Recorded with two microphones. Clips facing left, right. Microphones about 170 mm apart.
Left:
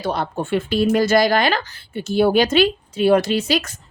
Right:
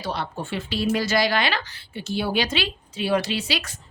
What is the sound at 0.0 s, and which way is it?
Speech, 50° left (ahead or behind).